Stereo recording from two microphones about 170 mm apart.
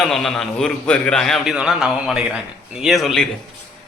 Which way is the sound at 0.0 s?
Centre (ahead or behind).